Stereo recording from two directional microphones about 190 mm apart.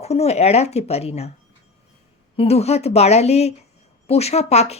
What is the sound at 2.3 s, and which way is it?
Speech, 30° left (ahead or behind).